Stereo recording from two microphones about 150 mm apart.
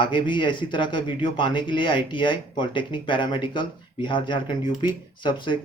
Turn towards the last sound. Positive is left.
turn(degrees=30)  # may be behind; listen again after turning